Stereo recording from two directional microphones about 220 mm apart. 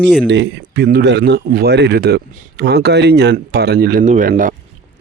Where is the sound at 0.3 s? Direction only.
55° right (ahead or behind); by 4.5 s 35° right (ahead or behind).